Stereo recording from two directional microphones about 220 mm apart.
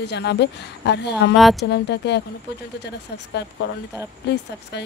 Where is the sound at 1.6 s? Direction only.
50° left (ahead or behind).